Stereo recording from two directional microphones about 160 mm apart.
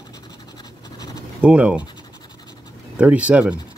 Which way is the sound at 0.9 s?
25° left (ahead or behind).